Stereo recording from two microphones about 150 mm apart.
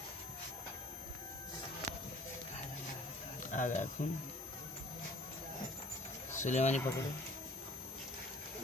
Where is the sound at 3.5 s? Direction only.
55° left (ahead or behind).